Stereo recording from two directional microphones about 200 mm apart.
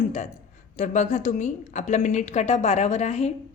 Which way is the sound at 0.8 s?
35° left (ahead or behind).